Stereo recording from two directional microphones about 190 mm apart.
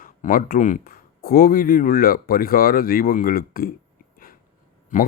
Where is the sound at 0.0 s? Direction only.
45° left (ahead or behind).